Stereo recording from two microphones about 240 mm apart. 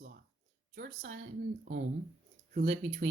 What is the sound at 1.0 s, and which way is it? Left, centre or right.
Speech, right.